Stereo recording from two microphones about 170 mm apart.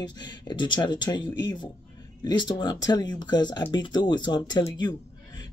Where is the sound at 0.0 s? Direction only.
25° left (ahead or behind).